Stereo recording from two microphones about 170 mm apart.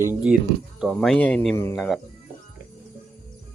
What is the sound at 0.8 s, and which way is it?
Speech, 5° left (ahead or behind).